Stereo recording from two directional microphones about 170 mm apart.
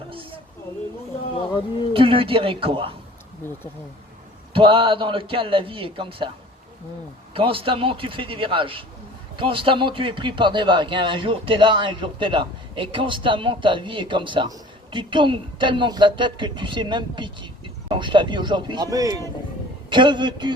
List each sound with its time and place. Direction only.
0.1 s a sound: 30° right (ahead or behind)
1.9 s a man's voice: 30° right (ahead or behind)
4.5 s a man's voice: 30° right (ahead or behind)
7.3 s a man's voice: 30° right (ahead or behind)